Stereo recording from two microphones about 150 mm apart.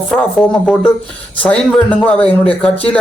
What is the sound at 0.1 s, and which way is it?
Speech, 5° left (ahead or behind).